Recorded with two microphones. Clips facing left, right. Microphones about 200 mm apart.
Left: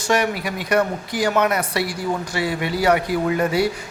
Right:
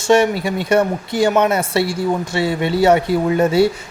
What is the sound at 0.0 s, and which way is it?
Speech, 25° right (ahead or behind).